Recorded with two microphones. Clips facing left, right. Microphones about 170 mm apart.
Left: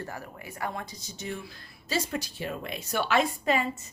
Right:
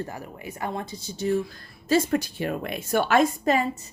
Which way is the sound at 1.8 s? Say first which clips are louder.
Right 9 dB; 55° right (ahead or behind).